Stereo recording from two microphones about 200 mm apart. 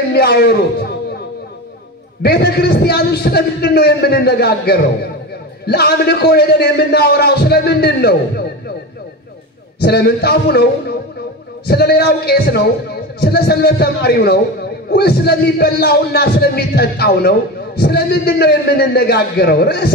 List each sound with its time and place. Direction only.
0.1 s speech: 55° left (ahead or behind)
2.2 s speech: 55° left (ahead or behind)
9.8 s speech: 55° left (ahead or behind)